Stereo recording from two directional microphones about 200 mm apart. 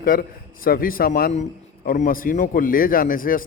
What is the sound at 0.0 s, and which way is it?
A man's voice, 45° left (ahead or behind).